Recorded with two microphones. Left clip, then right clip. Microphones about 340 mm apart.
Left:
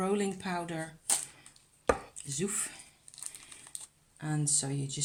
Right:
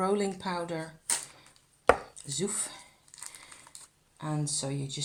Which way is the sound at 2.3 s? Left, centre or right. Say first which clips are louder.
Right 2 dB; left.